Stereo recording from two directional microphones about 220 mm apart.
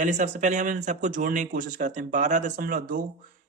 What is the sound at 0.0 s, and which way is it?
Speech, 35° right (ahead or behind).